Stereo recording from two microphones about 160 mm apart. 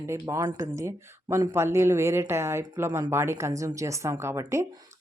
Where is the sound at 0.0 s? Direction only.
15° right (ahead or behind).